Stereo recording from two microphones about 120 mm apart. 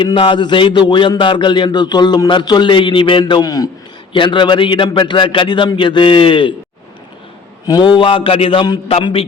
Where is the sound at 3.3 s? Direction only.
30° left (ahead or behind).